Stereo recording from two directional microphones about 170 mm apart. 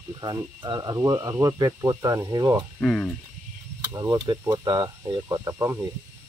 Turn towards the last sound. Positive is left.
turn(degrees=-20)  # may be behind; listen again after turning